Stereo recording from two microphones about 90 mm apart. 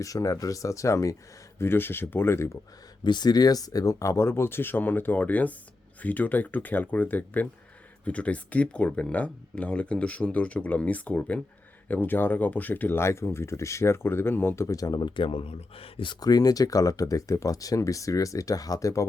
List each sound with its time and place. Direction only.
0.0 s speech: 40° left (ahead or behind)
3.0 s speech: 55° left (ahead or behind); by 16.1 s 85° left
16.2 s speech: 45° left (ahead or behind)